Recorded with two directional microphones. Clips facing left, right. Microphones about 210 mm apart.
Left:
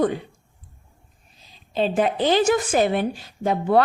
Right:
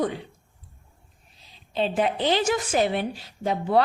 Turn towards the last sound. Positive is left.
turn(degrees=50)  # may be behind; listen again after turning